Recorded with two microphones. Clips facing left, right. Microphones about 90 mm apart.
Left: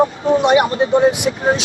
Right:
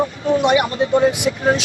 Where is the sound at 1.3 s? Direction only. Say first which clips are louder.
Left 1 dB; 35° left (ahead or behind).